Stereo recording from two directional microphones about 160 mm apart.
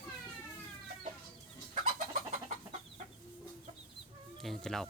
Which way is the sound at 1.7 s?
50° right (ahead or behind).